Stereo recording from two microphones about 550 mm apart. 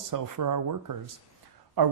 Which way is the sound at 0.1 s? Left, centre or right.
Right.